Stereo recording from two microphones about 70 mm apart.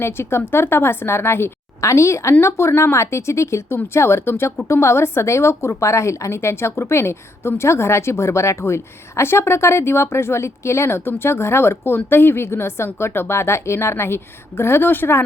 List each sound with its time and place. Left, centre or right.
0.0 s a woman's voice: left